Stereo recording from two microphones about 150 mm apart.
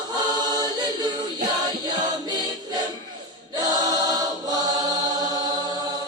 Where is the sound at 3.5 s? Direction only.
25° right (ahead or behind).